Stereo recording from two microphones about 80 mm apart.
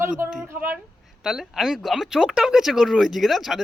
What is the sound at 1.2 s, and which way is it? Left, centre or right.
Speech, centre.